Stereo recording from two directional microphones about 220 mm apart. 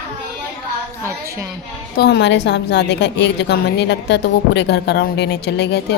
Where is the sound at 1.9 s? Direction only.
50° left (ahead or behind).